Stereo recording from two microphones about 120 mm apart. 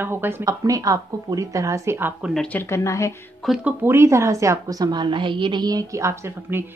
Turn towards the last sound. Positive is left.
turn(degrees=-25)  # may be behind; listen again after turning